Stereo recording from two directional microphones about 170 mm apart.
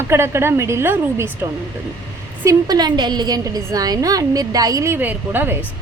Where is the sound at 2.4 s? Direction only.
20° right (ahead or behind).